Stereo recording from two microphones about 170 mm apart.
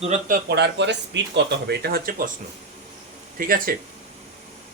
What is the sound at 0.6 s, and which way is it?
Speech, 90° right.